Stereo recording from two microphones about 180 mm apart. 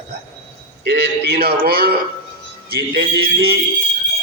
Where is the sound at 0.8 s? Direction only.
65° right (ahead or behind).